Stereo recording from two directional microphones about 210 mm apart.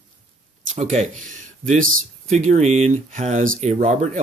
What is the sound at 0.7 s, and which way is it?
Speech, 35° right (ahead or behind).